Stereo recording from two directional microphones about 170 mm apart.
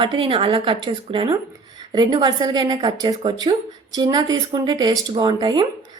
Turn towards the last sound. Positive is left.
turn(degrees=-25)  # may be behind; listen again after turning